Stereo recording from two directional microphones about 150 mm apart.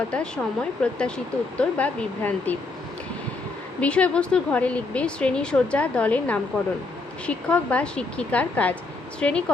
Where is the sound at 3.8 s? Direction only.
10° left (ahead or behind).